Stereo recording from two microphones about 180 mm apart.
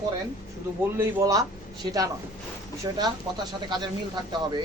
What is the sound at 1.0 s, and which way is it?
Speech, 20° right (ahead or behind).